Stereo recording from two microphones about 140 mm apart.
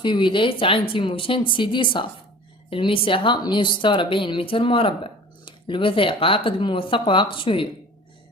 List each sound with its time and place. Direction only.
0.0 s a woman's voice: 35° left (ahead or behind)